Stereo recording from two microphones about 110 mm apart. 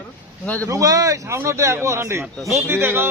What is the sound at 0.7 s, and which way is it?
A man's voice, 30° right (ahead or behind).